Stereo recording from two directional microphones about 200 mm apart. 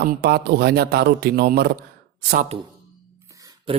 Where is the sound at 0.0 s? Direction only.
50° right (ahead or behind).